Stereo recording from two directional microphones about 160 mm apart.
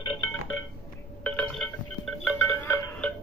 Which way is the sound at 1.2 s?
5° left (ahead or behind).